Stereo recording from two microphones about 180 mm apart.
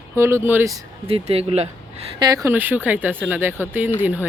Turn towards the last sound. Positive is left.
turn(degrees=-10)  # may be behind; listen again after turning